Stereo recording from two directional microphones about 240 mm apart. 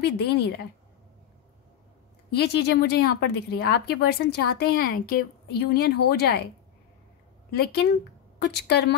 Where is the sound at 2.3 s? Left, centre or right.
Left.